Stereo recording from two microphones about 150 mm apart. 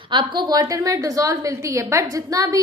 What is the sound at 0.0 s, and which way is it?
A woman's voice, 35° right (ahead or behind).